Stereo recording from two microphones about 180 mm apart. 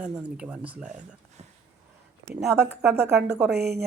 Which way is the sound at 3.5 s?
60° right (ahead or behind).